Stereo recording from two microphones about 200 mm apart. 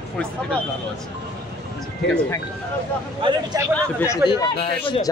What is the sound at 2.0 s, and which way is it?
Speech, 5° left (ahead or behind).